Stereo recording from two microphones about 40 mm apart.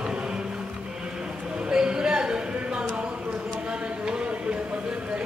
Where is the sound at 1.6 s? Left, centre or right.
Centre.